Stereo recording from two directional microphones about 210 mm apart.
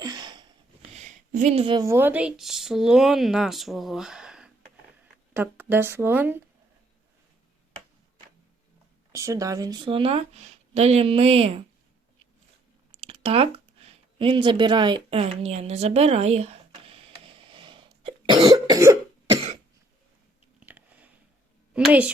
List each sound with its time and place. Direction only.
0.0 s sniff: 20° right (ahead or behind)
0.9 s speech: 35° right (ahead or behind); by 6.4 s 10° right (ahead or behind)
9.1 s speech: 15° right (ahead or behind)
13.0 s a sound: 25° right (ahead or behind)
20.6 s chewing: 10° right (ahead or behind)
21.7 s a sound: 5° right (ahead or behind)